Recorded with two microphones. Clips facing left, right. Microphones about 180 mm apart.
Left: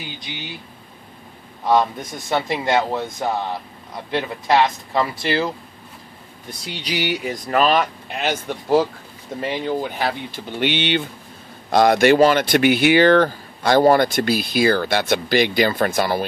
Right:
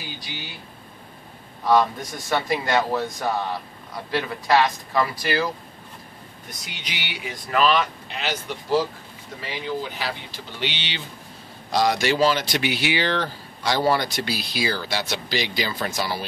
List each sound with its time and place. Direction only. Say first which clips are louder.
1.6 s speech: left 1 dB; 20° left (ahead or behind)
6.5 s speech: left 11 dB; 30° left (ahead or behind); by 16.3 s 50° left (ahead or behind)